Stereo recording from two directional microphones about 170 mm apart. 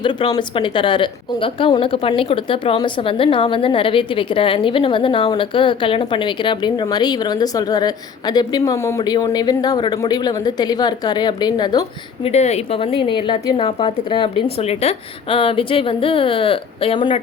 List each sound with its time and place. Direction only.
0.0 s a woman's voice: 30° left (ahead or behind)
12.3 s a woman's voice: 40° left (ahead or behind)